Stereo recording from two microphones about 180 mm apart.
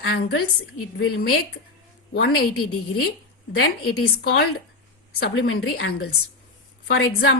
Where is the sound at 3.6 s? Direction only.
60° left (ahead or behind).